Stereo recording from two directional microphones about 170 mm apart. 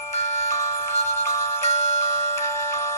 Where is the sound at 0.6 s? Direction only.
15° left (ahead or behind).